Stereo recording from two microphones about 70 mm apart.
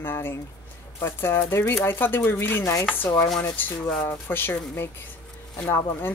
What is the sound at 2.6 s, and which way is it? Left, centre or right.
Chopping, left.